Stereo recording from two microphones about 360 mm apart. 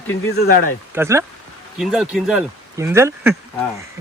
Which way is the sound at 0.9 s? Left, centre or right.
Centre.